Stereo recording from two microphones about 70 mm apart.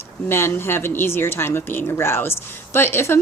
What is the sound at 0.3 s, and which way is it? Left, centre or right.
Speech, left.